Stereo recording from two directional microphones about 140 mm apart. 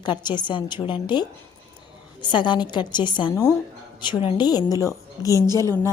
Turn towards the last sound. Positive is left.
turn(degrees=20)  # may be behind; listen again after turning